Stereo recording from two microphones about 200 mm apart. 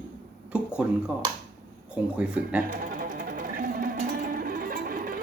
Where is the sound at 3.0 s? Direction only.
45° right (ahead or behind).